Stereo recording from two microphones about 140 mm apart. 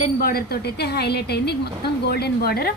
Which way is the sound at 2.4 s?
90° left.